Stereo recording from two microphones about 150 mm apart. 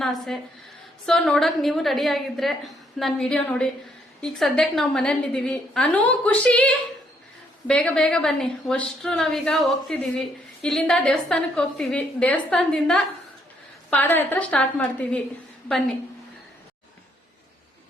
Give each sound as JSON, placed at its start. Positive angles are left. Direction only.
{"t": 0.0, "sound": "a woman's voice", "side_deg": 0}
{"t": 7.7, "sound": "a woman's voice", "side_deg": 5}